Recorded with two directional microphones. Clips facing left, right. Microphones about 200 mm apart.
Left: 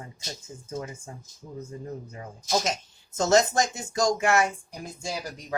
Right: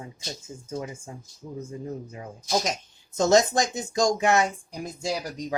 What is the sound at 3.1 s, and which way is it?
Speech, 15° right (ahead or behind).